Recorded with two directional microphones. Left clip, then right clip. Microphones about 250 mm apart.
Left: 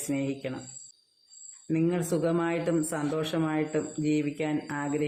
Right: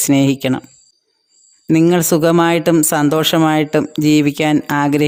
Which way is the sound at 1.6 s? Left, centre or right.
Right.